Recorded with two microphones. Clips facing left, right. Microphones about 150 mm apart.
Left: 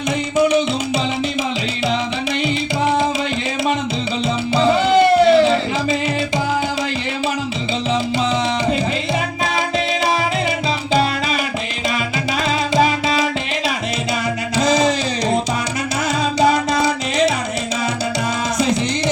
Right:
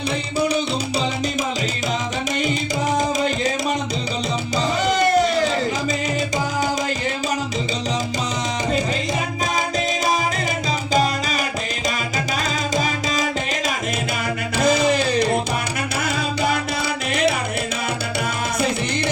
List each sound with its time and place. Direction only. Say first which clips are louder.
4.5 s music: left 7 dB; 40° right (ahead or behind)
12.7 s music: left 7 dB; 45° right (ahead or behind)
14.5 s a sound: left 1 dB; 55° right (ahead or behind)